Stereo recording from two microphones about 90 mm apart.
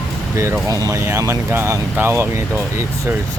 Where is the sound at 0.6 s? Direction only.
40° right (ahead or behind).